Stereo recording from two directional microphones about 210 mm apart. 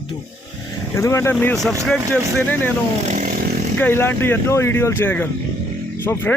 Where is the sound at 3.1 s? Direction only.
40° right (ahead or behind).